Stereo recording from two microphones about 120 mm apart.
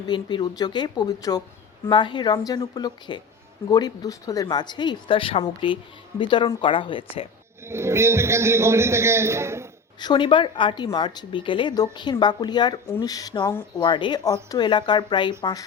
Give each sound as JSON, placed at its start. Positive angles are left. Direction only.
{"t": 0.1, "sound": "speech", "side_deg": 40}
{"t": 7.6, "sound": "a man's voice", "side_deg": -20}
{"t": 10.0, "sound": "speech", "side_deg": 40}